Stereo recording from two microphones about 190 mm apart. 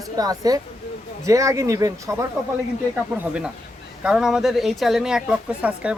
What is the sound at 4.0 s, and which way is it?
Speech, 5° right (ahead or behind).